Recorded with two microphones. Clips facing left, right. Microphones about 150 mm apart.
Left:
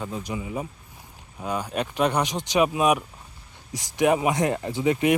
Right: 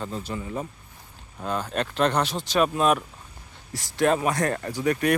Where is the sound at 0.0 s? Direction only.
10° left (ahead or behind).